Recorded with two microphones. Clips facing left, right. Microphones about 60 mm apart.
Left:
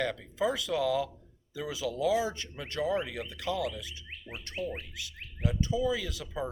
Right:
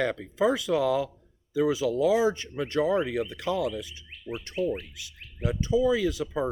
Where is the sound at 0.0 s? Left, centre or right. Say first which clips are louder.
Right 5 dB; right.